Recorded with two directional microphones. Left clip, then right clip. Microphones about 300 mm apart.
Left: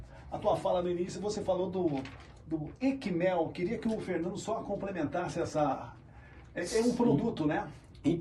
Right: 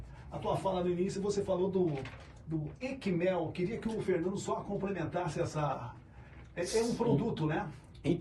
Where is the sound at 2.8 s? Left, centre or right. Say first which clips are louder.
Left 3 dB; left.